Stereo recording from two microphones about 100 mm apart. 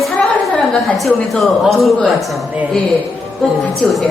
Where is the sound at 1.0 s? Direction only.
Centre (ahead or behind).